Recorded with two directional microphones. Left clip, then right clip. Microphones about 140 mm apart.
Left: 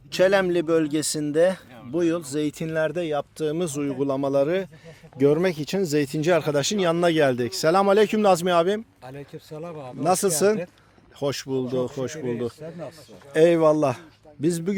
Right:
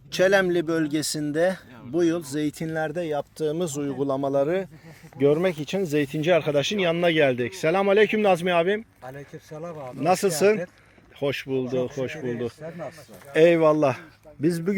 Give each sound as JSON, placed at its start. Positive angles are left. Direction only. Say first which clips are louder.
{"t": 0.1, "sound": "speech", "louder": "even", "side_deg": 0}
{"t": 5.2, "sound": "speech", "louder": "left 1 dB", "side_deg": 35}
{"t": 11.2, "sound": "speech", "louder": "even", "side_deg": 25}
{"t": 14.4, "sound": "speech", "louder": "even", "side_deg": 5}